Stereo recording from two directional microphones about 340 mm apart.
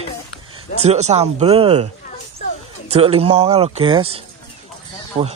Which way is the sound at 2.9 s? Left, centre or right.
Centre.